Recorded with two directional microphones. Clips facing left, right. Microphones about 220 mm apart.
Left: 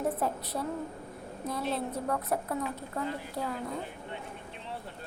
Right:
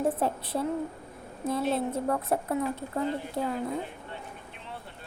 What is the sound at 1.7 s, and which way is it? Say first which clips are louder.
A woman's voice: right 4 dB; 25° right (ahead or behind).